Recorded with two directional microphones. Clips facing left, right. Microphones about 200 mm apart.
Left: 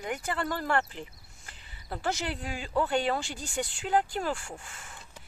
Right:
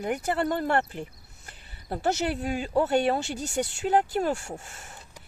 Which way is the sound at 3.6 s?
40° right (ahead or behind).